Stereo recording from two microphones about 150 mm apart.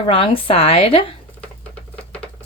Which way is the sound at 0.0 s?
40° left (ahead or behind).